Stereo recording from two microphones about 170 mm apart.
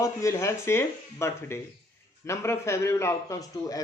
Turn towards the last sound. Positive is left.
turn(degrees=20)  # may be behind; listen again after turning